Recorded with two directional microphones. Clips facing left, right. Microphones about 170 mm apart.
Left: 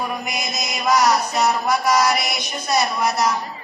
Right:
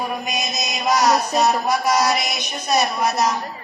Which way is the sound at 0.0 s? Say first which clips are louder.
Right 1 dB; 20° right (ahead or behind).